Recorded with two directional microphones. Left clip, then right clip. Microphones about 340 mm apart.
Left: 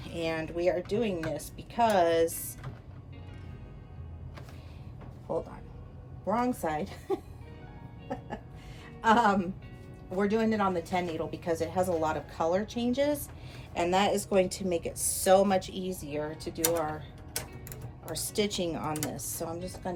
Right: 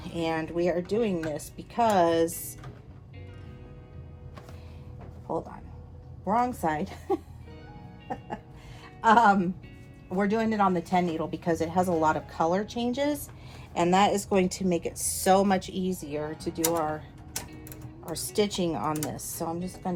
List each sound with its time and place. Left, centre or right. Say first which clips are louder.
0.0 s a woman's voice: right 3 dB; centre
6.2 s a woman's voice: right 4 dB; centre
9.0 s a woman's voice: right 4 dB; centre
18.1 s speech: right 3 dB; centre